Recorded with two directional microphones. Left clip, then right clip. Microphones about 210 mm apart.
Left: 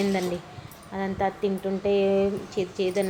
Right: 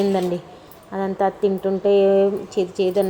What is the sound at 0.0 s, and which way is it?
A woman's voice, 15° right (ahead or behind).